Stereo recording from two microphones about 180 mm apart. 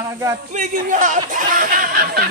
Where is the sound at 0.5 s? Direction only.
45° right (ahead or behind).